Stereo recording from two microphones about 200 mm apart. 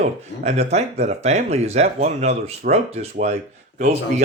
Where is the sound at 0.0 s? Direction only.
35° right (ahead or behind).